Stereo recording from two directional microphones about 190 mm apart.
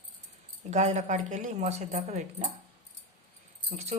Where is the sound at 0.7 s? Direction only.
40° right (ahead or behind).